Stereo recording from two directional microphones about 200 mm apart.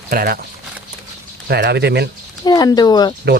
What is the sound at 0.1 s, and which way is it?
Speech, 45° right (ahead or behind).